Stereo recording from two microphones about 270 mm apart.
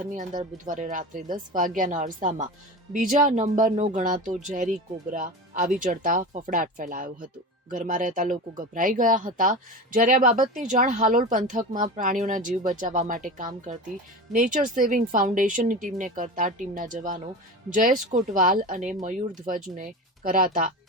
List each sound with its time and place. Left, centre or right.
0.1 s speech: right